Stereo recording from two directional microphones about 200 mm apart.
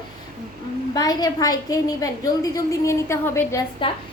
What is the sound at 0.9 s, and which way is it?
A woman's voice, 20° left (ahead or behind).